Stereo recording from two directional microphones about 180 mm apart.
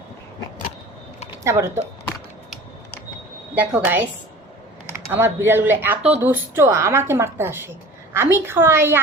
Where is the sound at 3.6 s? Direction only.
10° right (ahead or behind).